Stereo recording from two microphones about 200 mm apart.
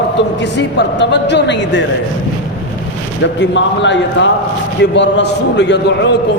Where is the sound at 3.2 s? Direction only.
65° left (ahead or behind).